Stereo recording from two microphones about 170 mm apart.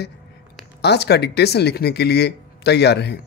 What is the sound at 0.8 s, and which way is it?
Speech, 75° left (ahead or behind).